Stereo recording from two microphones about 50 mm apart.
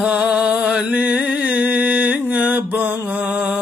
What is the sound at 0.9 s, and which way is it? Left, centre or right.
Mantra, right.